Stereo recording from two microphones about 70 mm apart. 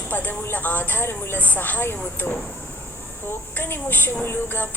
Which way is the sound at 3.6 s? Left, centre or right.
Left.